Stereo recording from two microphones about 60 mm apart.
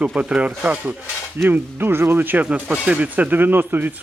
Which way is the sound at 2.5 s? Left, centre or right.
Centre.